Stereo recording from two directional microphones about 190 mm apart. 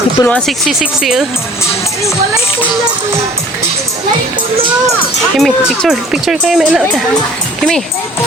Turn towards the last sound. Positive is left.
turn(degrees=-5)  # may be behind; listen again after turning